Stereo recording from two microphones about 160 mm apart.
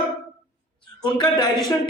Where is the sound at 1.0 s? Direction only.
30° left (ahead or behind).